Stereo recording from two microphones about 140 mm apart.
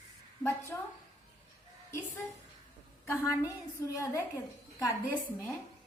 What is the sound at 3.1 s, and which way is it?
A woman's voice, 20° left (ahead or behind).